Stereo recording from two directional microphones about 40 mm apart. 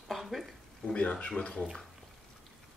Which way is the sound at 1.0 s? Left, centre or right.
Left.